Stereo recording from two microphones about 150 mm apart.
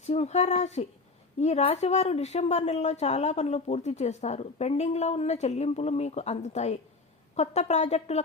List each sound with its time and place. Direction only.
0.0 s speech: 45° left (ahead or behind)